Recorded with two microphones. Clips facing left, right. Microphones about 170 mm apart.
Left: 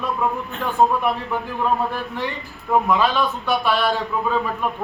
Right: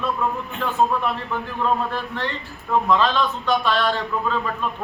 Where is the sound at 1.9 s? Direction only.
10° left (ahead or behind).